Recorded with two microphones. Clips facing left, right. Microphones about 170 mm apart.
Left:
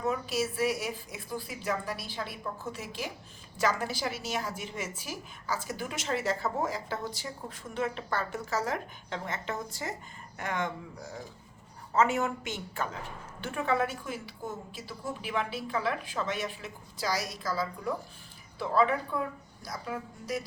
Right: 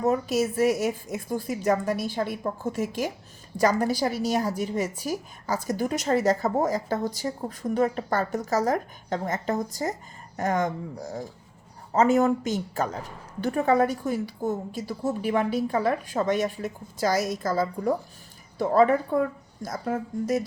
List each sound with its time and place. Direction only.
0.0 s a woman's voice: 45° right (ahead or behind)